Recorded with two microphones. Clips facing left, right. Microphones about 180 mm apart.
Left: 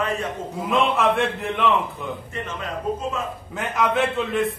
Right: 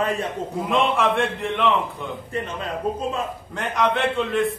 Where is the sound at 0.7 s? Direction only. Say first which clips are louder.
Left 1 dB; centre (ahead or behind).